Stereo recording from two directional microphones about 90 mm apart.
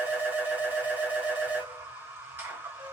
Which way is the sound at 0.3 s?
20° right (ahead or behind).